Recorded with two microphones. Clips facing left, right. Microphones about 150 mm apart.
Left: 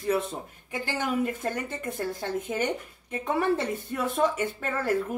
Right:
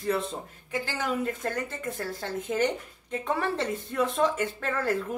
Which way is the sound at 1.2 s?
15° left (ahead or behind).